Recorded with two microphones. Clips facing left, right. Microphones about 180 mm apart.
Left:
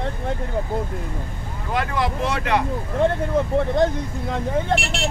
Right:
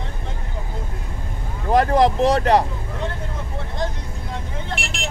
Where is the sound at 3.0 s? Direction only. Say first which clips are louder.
Left 10 dB; 50° left (ahead or behind).